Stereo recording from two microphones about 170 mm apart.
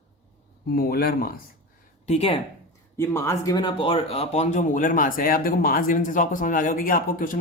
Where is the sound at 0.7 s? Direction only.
65° left (ahead or behind).